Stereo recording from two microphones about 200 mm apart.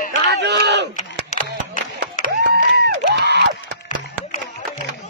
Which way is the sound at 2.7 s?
60° right (ahead or behind).